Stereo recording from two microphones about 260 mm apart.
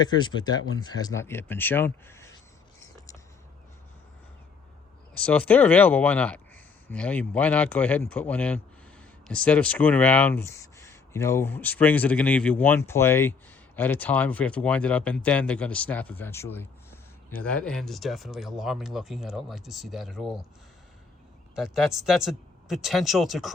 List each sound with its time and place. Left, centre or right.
0.0 s speech: centre
5.1 s speech: centre
21.5 s speech: centre